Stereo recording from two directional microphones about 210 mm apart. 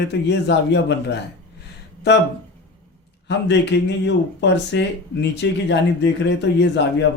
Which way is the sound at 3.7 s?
55° left (ahead or behind).